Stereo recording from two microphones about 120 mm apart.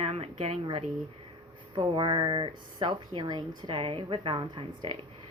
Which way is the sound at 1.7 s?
40° right (ahead or behind).